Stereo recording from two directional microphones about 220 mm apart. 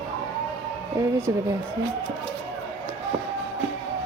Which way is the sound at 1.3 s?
15° right (ahead or behind).